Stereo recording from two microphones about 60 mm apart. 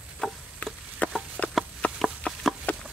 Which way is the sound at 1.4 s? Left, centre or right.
Centre.